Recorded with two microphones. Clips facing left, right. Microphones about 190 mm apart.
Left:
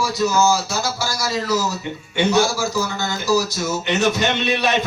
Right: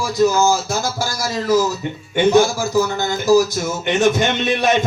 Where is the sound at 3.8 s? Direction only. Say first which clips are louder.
Right 4 dB; 50° right (ahead or behind).